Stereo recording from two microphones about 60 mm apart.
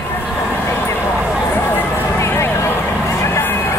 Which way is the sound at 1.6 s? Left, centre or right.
Left.